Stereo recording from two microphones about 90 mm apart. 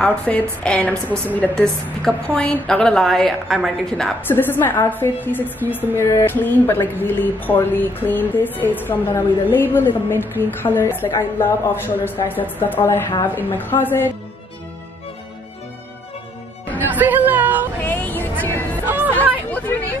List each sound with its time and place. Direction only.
0.0 s a woman's voice: 15° left (ahead or behind); by 3.7 s 5° right (ahead or behind)
4.3 s speech: 25° left (ahead or behind)
16.7 s a sound: 20° right (ahead or behind)
17.8 s vehicle: 20° left (ahead or behind)
18.4 s music: 25° left (ahead or behind)
18.9 s chatter: 20° right (ahead or behind)
19.5 s hubbub: 20° left (ahead or behind)